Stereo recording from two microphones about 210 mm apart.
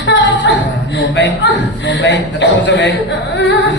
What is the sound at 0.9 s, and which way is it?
A man's voice, 60° left (ahead or behind).